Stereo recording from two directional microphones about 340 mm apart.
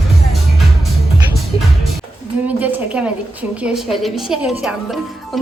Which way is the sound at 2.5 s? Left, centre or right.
Centre.